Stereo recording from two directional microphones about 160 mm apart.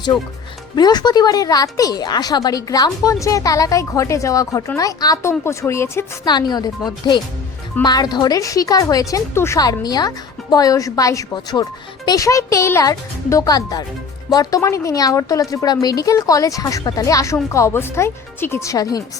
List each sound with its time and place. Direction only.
0.8 s speech: 25° left (ahead or behind)